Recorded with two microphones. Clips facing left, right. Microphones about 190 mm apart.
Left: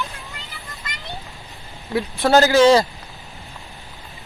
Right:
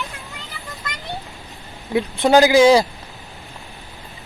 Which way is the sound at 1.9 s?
15° right (ahead or behind).